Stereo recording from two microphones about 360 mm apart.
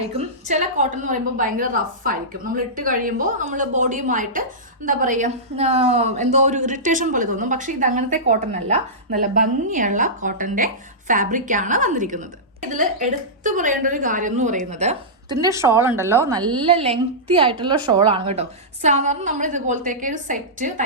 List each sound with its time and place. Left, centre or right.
0.4 s a woman's voice: centre